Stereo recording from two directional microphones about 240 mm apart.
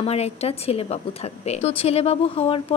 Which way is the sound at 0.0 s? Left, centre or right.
Left.